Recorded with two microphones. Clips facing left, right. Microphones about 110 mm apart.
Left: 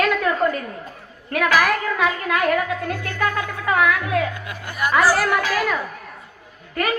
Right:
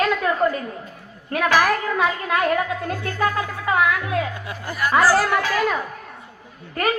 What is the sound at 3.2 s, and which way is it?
A woman's voice, 30° right (ahead or behind).